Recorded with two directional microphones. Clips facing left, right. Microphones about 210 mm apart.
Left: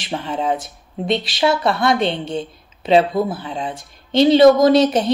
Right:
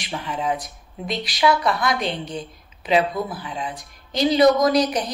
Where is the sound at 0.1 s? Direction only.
30° left (ahead or behind).